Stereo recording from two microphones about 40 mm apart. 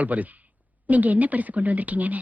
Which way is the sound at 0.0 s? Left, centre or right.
Right.